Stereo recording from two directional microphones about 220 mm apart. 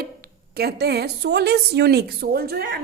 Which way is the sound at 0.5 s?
45° right (ahead or behind).